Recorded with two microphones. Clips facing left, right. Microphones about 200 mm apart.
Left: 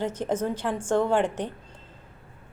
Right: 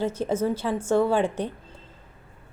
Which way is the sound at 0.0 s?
10° right (ahead or behind).